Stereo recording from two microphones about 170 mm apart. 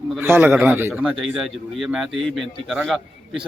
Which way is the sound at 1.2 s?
Centre (ahead or behind).